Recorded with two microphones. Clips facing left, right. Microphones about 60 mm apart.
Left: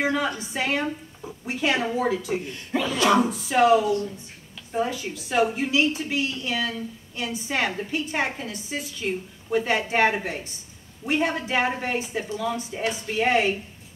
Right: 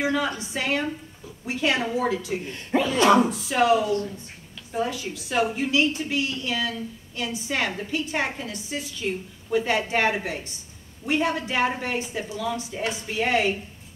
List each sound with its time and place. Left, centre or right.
0.6 s a woman's voice: centre
2.4 s speech: right
3.4 s a woman's voice: centre
12.7 s a woman's voice: centre